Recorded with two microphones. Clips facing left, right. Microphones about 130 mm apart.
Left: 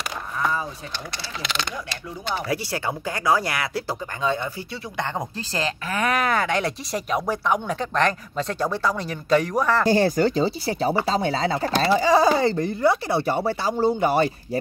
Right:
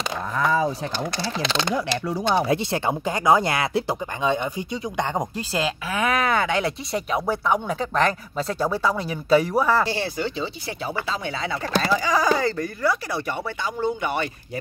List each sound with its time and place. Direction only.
0.4 s speech: 90° right
2.4 s speech: 20° right (ahead or behind)
9.8 s speech: 45° left (ahead or behind)